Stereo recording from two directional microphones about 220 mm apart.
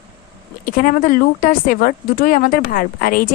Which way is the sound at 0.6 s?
40° left (ahead or behind).